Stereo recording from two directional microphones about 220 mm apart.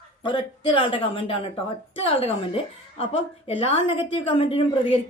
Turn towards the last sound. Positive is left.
turn(degrees=25)  # may be behind; listen again after turning